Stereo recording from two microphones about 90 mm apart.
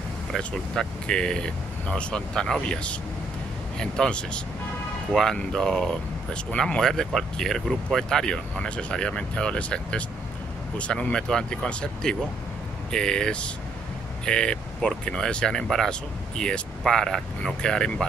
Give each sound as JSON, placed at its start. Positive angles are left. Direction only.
{"t": 0.4, "sound": "speech", "side_deg": 10}